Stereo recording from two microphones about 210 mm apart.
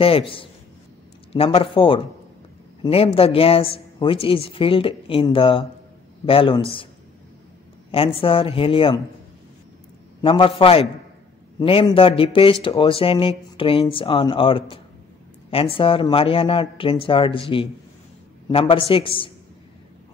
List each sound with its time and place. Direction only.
0.0 s speech: 25° left (ahead or behind)
7.9 s speech: 25° left (ahead or behind)
10.2 s speech: 25° left (ahead or behind)